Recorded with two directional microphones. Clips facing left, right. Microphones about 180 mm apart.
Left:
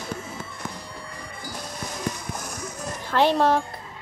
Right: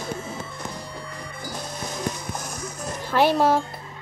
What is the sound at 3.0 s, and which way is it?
Speech, 10° right (ahead or behind).